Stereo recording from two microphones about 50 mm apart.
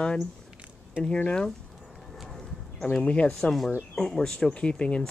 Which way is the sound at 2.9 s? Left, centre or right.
Left.